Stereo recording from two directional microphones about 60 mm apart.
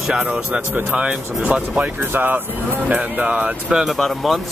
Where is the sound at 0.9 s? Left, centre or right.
Centre.